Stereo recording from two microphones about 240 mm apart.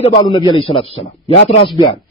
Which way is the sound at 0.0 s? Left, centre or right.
Left.